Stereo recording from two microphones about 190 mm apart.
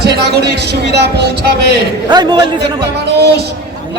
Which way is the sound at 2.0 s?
20° right (ahead or behind).